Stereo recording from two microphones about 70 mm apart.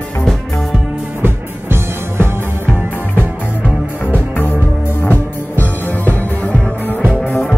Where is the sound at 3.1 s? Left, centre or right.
Left.